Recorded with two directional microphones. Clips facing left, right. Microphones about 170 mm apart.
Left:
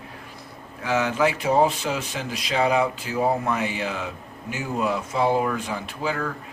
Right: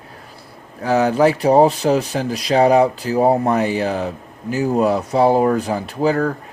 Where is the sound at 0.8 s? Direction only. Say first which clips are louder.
Right 7 dB; 35° right (ahead or behind).